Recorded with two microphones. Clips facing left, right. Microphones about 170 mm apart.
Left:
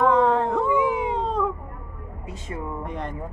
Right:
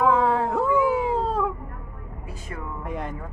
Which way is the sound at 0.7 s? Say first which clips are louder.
Right 1 dB; 20° left (ahead or behind).